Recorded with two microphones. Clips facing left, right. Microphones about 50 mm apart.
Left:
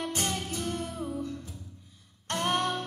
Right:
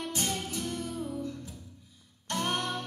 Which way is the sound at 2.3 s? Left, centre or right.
Left.